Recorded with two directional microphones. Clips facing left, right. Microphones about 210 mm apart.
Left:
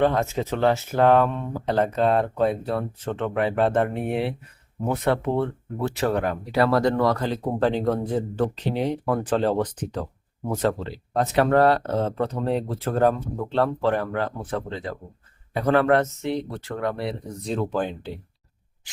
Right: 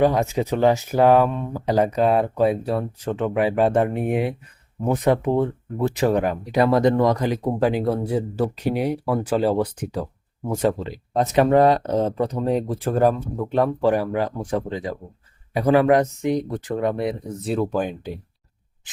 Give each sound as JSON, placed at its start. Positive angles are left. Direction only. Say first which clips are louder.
{"t": 0.0, "sound": "speech", "louder": "right 3 dB", "side_deg": -15}
{"t": 17.4, "sound": "speech", "louder": "right 3 dB", "side_deg": -10}